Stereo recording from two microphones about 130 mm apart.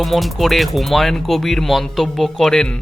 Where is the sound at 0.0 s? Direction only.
Centre (ahead or behind).